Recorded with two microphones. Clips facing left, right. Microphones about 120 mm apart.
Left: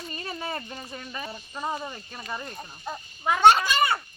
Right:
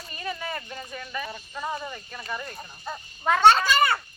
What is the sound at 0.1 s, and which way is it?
Speech, 35° left (ahead or behind).